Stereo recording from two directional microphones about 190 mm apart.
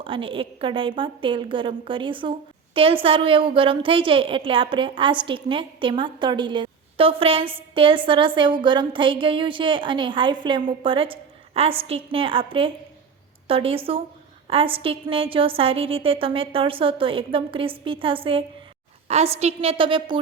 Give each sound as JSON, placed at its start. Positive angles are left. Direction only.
{"t": 0.0, "sound": "a woman's voice", "side_deg": -25}